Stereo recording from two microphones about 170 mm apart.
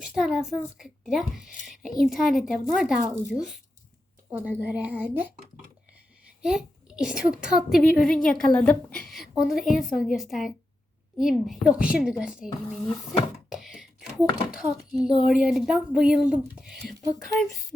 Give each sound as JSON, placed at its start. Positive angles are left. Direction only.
{"t": 0.0, "sound": "a woman's voice", "side_deg": -5}
{"t": 4.3, "sound": "speech", "side_deg": -10}
{"t": 6.4, "sound": "a woman's voice", "side_deg": -5}
{"t": 12.8, "sound": "speech", "side_deg": 30}
{"t": 13.5, "sound": "a sound", "side_deg": -5}
{"t": 14.5, "sound": "a woman's voice", "side_deg": -5}